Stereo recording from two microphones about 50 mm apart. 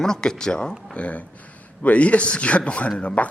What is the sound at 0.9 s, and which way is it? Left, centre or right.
Speech, left.